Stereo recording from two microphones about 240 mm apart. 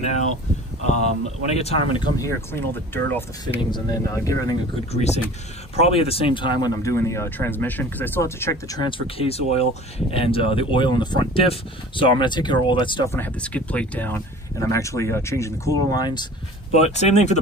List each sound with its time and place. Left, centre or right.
1.5 s speech: left
4.9 s speech: left
16.7 s speech: left